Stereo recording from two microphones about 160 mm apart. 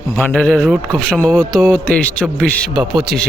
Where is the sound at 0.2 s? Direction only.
5° left (ahead or behind).